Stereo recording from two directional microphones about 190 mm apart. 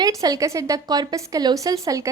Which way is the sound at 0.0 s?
20° right (ahead or behind).